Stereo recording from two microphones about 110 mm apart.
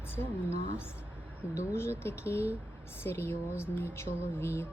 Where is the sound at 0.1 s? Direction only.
20° left (ahead or behind).